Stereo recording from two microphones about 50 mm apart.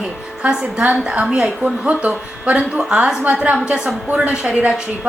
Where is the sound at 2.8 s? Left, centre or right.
Centre.